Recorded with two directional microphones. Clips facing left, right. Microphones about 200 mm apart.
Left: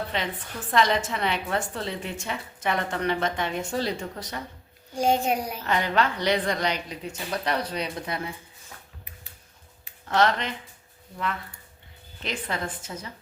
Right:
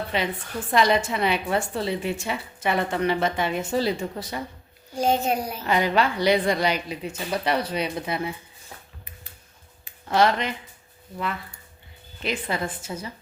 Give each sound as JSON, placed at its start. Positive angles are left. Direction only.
{"t": 0.1, "sound": "a woman's voice", "side_deg": -10}
{"t": 4.9, "sound": "a child's voice", "side_deg": 15}
{"t": 5.6, "sound": "a woman's voice", "side_deg": -10}
{"t": 10.1, "sound": "a woman's voice", "side_deg": -10}
{"t": 12.2, "sound": "a woman's voice", "side_deg": -10}